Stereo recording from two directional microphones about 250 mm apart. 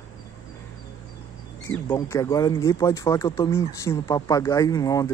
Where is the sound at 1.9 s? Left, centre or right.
Centre.